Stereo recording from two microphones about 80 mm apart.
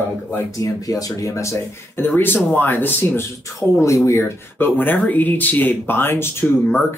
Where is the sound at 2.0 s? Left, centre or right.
Left.